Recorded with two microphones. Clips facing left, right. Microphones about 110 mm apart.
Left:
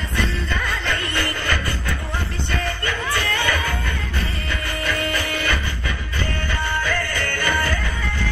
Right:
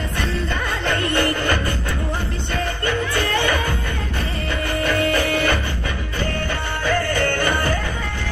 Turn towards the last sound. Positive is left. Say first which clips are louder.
# right 2 dB
turn(degrees=-35)  # may be behind; listen again after turning